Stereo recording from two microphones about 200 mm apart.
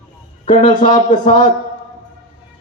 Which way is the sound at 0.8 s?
35° left (ahead or behind).